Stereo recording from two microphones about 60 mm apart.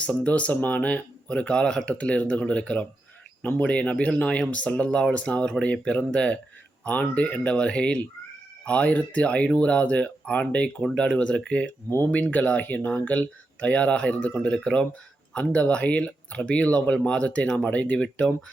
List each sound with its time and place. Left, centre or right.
0.0 s speech: left